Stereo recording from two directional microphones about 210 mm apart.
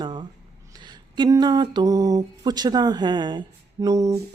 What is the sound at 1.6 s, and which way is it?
A woman's voice, 20° right (ahead or behind).